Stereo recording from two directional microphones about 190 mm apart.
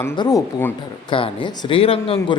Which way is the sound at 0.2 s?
20° left (ahead or behind).